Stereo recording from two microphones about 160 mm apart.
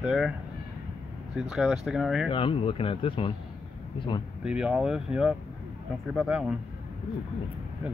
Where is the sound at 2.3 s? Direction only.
35° left (ahead or behind).